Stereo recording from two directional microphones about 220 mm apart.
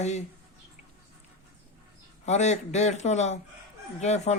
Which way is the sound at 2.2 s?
30° left (ahead or behind).